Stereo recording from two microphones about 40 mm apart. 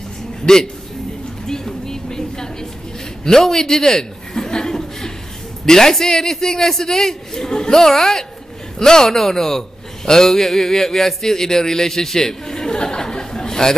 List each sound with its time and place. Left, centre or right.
0.5 s a man's voice: centre
1.5 s a sound: centre
3.3 s chuckle: centre
5.7 s a man's voice: centre